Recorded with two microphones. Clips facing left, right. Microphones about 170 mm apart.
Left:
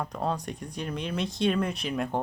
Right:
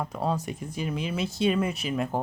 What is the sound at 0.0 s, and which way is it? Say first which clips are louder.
Speech: right 2 dB; 5° right (ahead or behind).